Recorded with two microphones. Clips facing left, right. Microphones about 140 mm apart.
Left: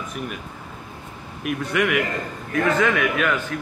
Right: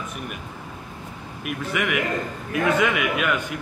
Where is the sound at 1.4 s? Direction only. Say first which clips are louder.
Left 4 dB; centre (ahead or behind).